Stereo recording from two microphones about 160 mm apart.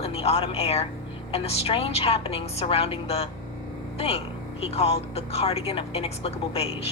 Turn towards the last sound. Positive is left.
turn(degrees=40)  # may be behind; listen again after turning